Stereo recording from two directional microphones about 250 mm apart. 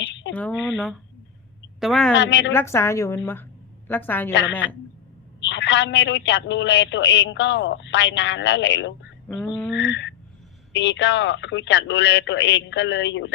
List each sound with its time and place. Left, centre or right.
0.0 s a sound: left
0.3 s a woman's voice: centre
1.8 s a woman's voice: centre
2.1 s a man's voice: left
2.5 s a woman's voice: centre
5.4 s a man's voice: left
9.3 s a woman's voice: centre
9.7 s a sound: left
10.7 s a man's voice: left